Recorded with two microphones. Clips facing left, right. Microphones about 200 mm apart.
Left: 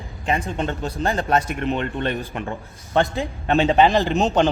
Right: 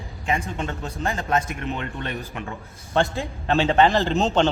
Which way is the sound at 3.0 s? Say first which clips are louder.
Left 2 dB; 15° left (ahead or behind).